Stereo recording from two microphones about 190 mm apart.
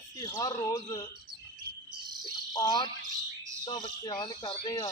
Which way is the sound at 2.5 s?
20° left (ahead or behind).